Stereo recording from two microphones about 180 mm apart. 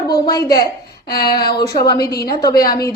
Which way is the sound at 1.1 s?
60° left (ahead or behind).